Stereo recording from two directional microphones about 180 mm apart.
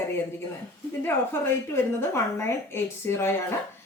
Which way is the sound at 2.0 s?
15° left (ahead or behind).